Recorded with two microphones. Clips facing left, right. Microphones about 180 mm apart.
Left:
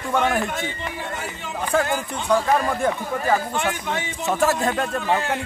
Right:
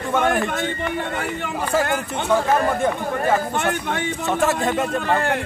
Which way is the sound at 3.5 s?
55° right (ahead or behind).